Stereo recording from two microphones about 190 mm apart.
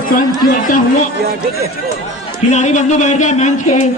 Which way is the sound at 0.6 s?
45° left (ahead or behind).